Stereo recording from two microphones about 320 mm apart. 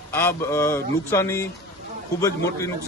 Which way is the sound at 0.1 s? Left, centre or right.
Centre.